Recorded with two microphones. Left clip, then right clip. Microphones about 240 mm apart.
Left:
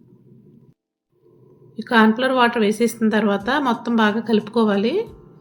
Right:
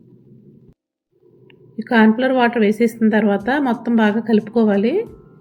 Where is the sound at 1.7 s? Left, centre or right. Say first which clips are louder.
Right 1 dB; centre.